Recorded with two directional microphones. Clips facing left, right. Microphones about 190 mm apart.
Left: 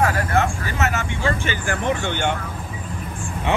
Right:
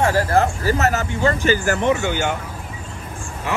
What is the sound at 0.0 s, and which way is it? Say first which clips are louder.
Speech: right 3 dB; 30° right (ahead or behind).